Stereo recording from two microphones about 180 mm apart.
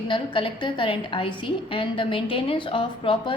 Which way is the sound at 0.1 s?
30° left (ahead or behind).